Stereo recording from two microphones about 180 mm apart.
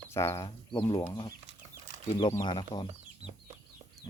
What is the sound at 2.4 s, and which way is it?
Speech, 25° left (ahead or behind).